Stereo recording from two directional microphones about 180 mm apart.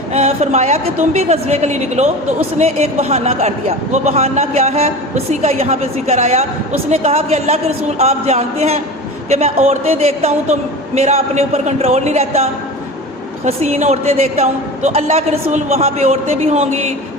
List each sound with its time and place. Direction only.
0.1 s a woman's voice: 35° right (ahead or behind)